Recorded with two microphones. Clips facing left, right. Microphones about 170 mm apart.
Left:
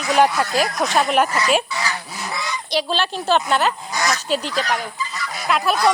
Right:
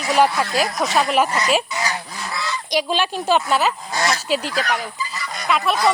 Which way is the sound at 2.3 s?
20° left (ahead or behind).